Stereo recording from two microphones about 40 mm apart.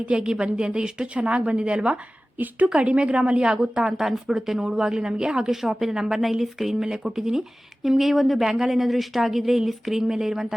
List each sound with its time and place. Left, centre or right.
0.2 s a woman's voice: right